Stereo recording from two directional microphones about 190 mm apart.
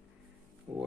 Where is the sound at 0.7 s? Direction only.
15° right (ahead or behind).